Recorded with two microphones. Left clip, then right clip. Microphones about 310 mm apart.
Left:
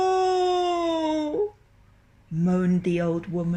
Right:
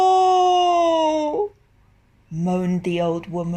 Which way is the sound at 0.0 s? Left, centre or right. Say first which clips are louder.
Right 7 dB; right.